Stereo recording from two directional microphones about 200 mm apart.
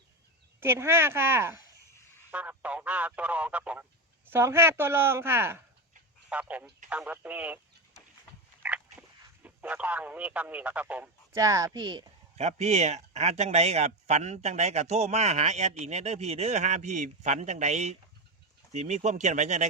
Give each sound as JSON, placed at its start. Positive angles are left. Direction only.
{"t": 0.6, "sound": "speech", "side_deg": -10}
{"t": 2.0, "sound": "a sound", "side_deg": 15}
{"t": 2.3, "sound": "speech", "side_deg": -5}
{"t": 8.6, "sound": "biting", "side_deg": -5}
{"t": 9.0, "sound": "speech", "side_deg": -5}
{"t": 12.4, "sound": "speech", "side_deg": -35}